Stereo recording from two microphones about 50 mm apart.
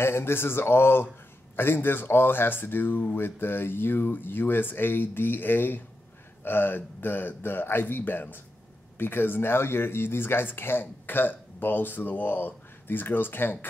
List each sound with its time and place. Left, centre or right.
0.0 s speech: left